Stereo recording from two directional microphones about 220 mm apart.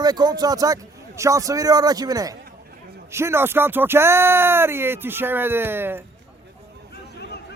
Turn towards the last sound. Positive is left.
turn(degrees=-10)  # may be behind; listen again after turning